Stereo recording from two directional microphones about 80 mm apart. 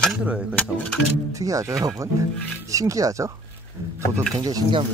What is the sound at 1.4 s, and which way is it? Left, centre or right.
Speech, right.